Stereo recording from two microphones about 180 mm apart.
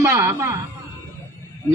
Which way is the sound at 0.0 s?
15° right (ahead or behind).